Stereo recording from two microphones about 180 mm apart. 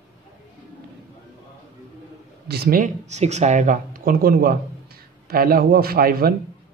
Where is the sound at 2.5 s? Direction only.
55° right (ahead or behind).